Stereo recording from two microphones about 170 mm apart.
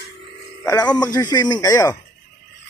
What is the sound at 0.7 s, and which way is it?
Speech, 25° left (ahead or behind).